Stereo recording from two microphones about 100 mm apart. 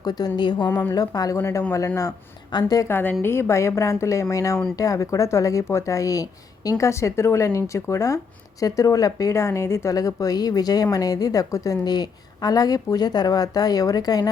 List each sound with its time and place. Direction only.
0.0 s a woman's voice: 40° left (ahead or behind)
0.7 s a woman's voice: 20° left (ahead or behind)
0.9 s a woman's voice: 40° left (ahead or behind)
1.4 s a woman's voice: 25° left (ahead or behind)
2.5 s a woman's voice: 45° left (ahead or behind)
2.8 s a woman's voice: 20° left (ahead or behind); by 14.3 s 40° left (ahead or behind)